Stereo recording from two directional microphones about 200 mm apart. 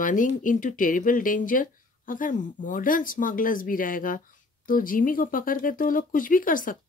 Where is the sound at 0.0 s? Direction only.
40° left (ahead or behind).